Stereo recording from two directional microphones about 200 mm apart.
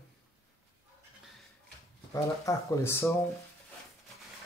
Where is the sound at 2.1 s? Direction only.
15° left (ahead or behind).